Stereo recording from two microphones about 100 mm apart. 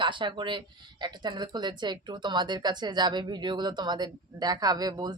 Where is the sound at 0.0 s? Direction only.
55° right (ahead or behind).